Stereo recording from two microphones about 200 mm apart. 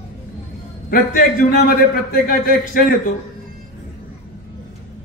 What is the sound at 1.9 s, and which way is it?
Speech, 45° left (ahead or behind).